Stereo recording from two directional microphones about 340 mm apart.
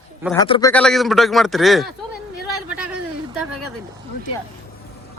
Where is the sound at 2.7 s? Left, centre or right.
Centre.